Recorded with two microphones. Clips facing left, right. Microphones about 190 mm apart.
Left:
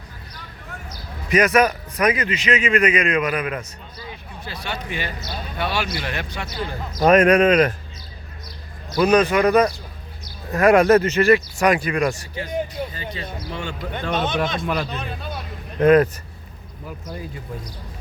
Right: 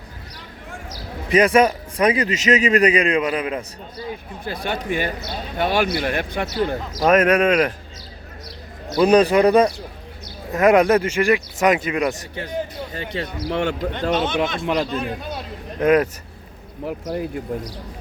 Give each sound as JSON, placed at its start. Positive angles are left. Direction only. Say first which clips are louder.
{"t": 1.3, "sound": "a man's voice", "louder": "right 2 dB", "side_deg": -30}
{"t": 4.1, "sound": "speech", "louder": "right 6 dB", "side_deg": -50}
{"t": 6.5, "sound": "speech", "louder": "right 7 dB", "side_deg": -80}
{"t": 7.0, "sound": "speech", "louder": "left 2 dB", "side_deg": -5}
{"t": 9.0, "sound": "a man's voice", "louder": "right 2 dB", "side_deg": -30}
{"t": 12.9, "sound": "speech", "louder": "right 4 dB", "side_deg": -70}
{"t": 14.3, "sound": "speech", "louder": "right 2 dB", "side_deg": -20}
{"t": 15.8, "sound": "speech", "louder": "left 2 dB", "side_deg": -5}
{"t": 16.8, "sound": "speech", "louder": "right 8 dB", "side_deg": -65}